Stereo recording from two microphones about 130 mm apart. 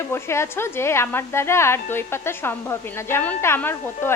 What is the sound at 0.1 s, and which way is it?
A woman's voice, 20° left (ahead or behind).